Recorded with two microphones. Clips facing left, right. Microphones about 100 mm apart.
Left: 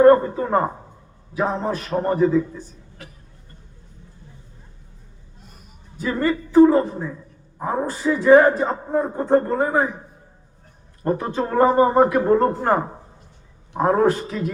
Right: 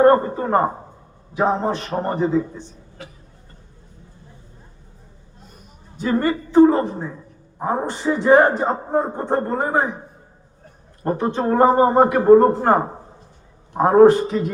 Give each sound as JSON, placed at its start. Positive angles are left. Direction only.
{"t": 0.0, "sound": "a man's voice", "side_deg": -30}
{"t": 6.0, "sound": "a man's voice", "side_deg": -25}
{"t": 11.0, "sound": "a woman's voice", "side_deg": -35}